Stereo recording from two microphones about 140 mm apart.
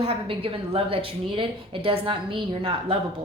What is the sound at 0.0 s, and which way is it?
Speech, 40° right (ahead or behind).